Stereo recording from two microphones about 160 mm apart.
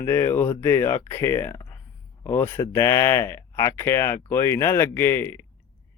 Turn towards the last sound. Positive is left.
turn(degrees=15)  # may be behind; listen again after turning